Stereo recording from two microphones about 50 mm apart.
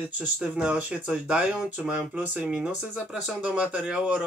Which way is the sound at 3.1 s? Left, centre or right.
Centre.